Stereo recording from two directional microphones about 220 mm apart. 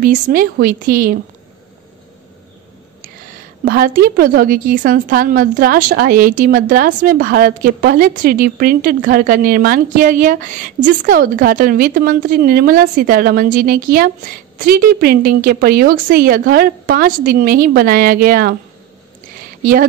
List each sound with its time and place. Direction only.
0.0 s a woman's voice: 40° right (ahead or behind)
3.6 s a woman's voice: 40° right (ahead or behind)
19.6 s a woman's voice: 40° right (ahead or behind)